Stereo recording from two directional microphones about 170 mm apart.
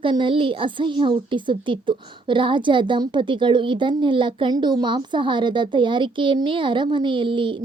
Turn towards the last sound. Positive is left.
turn(degrees=-30)  # may be behind; listen again after turning